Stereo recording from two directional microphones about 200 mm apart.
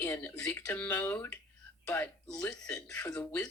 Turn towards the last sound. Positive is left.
turn(degrees=5)  # may be behind; listen again after turning